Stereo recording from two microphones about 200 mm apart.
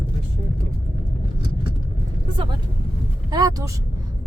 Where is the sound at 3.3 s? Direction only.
20° right (ahead or behind).